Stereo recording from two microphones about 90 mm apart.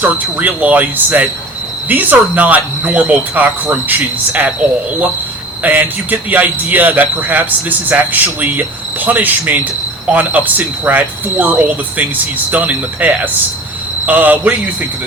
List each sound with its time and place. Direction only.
0.0 s speech: 20° right (ahead or behind)
5.6 s speech: 20° right (ahead or behind)